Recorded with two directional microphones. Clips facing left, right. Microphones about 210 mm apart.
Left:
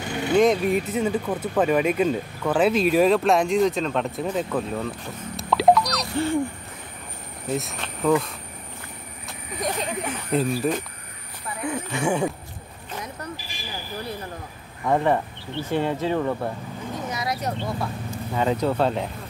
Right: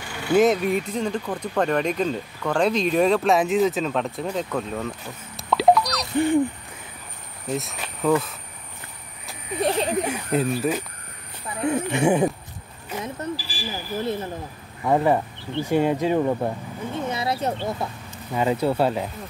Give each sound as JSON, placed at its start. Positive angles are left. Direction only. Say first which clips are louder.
{"t": 0.3, "sound": "speech", "louder": "even", "side_deg": -5}
{"t": 6.1, "sound": "speech", "louder": "right 4 dB", "side_deg": -15}
{"t": 7.4, "sound": "speech", "louder": "left 1 dB", "side_deg": 0}
{"t": 9.6, "sound": "speech", "louder": "right 5 dB", "side_deg": -30}
{"t": 10.3, "sound": "speech", "louder": "even", "side_deg": -5}
{"t": 11.6, "sound": "speech", "louder": "right 5 dB", "side_deg": -20}
{"t": 13.0, "sound": "buzzer", "louder": "right 8 dB", "side_deg": -30}
{"t": 14.9, "sound": "speech", "louder": "right 1 dB", "side_deg": -10}
{"t": 16.9, "sound": "a sound", "louder": "right 3 dB", "side_deg": -30}
{"t": 18.1, "sound": "speech", "louder": "right 1 dB", "side_deg": -5}